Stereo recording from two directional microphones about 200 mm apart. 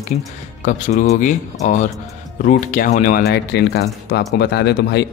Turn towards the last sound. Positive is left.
turn(degrees=55)  # may be behind; listen again after turning